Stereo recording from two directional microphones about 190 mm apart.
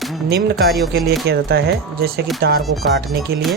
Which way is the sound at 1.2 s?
55° right (ahead or behind).